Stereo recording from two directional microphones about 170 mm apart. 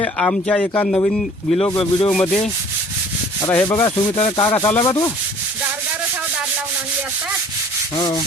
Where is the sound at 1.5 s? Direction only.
35° left (ahead or behind).